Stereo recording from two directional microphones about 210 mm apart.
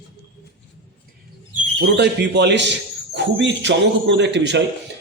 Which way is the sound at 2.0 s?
55° right (ahead or behind).